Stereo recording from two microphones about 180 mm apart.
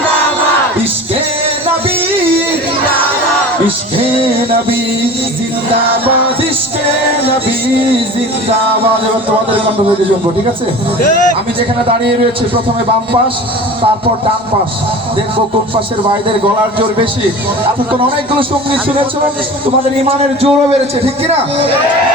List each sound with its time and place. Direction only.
3.9 s music: 30° right (ahead or behind)
20.1 s a man's voice: 35° right (ahead or behind)